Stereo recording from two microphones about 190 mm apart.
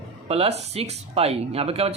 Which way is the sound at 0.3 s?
35° right (ahead or behind).